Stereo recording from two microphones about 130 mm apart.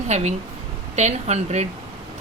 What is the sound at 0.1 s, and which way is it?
Speech, 60° right (ahead or behind).